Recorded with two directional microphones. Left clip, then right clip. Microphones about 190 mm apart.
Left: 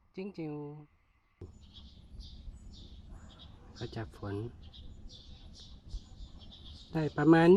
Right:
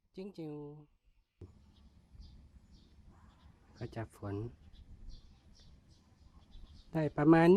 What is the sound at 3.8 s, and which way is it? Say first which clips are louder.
Speech: left 2 dB; 10° right (ahead or behind).